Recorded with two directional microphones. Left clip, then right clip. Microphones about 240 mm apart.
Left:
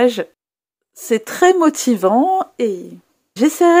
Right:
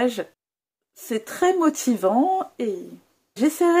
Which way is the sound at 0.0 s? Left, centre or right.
Left.